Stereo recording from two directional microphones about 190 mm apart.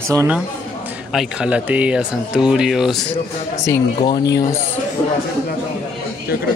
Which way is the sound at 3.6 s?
20° left (ahead or behind).